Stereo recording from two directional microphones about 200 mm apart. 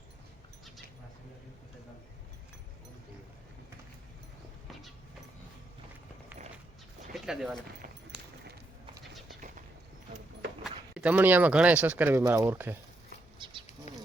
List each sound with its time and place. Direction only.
7.1 s a sound: centre (ahead or behind)
10.6 s speech: 5° right (ahead or behind)
13.4 s insect: 25° right (ahead or behind)
13.9 s bee: 35° left (ahead or behind)